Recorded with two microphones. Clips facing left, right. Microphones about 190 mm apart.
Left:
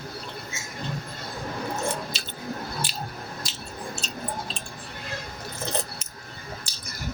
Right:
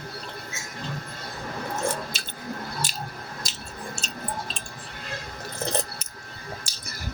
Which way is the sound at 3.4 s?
45° right (ahead or behind).